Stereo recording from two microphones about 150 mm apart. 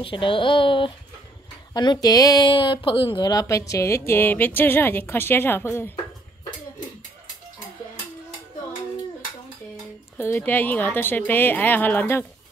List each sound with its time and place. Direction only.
0.0 s a woman's voice: 35° left (ahead or behind); by 5.9 s 15° left (ahead or behind)
10.1 s a woman's voice: 15° left (ahead or behind)